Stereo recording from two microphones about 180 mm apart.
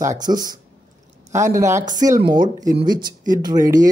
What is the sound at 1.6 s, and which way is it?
Speech, 15° right (ahead or behind).